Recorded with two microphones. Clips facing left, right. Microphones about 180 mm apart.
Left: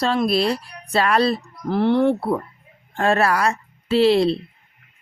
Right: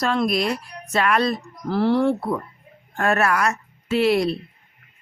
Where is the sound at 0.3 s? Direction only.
30° left (ahead or behind).